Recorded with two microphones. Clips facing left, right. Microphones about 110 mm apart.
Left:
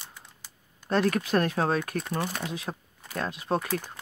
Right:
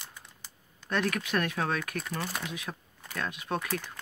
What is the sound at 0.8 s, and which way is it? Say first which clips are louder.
Speech: left 5 dB; 35° left (ahead or behind).